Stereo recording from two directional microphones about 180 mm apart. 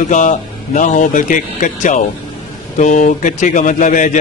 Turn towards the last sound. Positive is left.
turn(degrees=45)  # may be behind; listen again after turning